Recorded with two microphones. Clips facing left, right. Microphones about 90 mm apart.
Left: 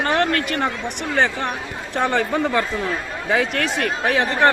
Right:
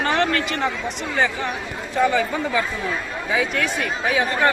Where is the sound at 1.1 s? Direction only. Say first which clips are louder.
Left 2 dB; 60° left (ahead or behind).